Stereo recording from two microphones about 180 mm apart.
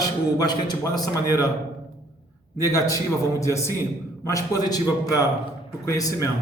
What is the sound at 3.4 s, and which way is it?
A man's voice, 15° left (ahead or behind).